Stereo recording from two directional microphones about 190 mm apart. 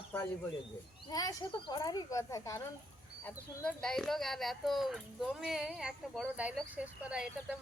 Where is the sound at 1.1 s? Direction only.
20° left (ahead or behind).